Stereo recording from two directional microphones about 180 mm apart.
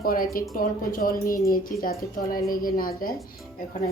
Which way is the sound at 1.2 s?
15° left (ahead or behind).